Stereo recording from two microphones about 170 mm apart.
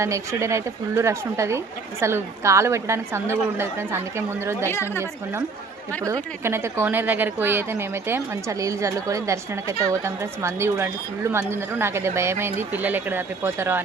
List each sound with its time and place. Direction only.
0.0 s speech: 15° right (ahead or behind)
4.6 s a woman's voice: 15° left (ahead or behind)
6.4 s speech: 15° right (ahead or behind)